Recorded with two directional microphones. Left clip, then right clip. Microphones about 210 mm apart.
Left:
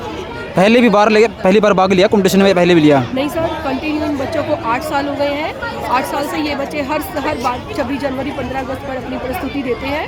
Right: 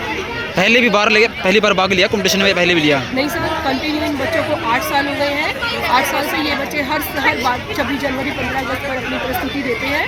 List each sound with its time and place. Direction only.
0.5 s a man's voice: 45° left (ahead or behind)